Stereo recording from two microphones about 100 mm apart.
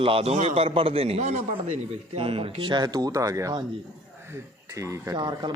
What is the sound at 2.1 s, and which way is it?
Speech, 70° right (ahead or behind).